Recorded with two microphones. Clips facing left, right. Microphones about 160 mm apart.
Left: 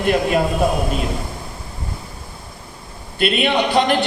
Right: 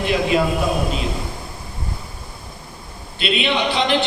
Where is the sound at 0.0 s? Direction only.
50° left (ahead or behind).